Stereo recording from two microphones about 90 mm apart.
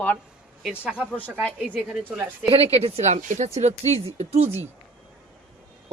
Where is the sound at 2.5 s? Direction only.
90° right.